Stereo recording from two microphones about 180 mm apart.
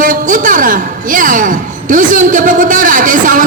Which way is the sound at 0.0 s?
45° right (ahead or behind).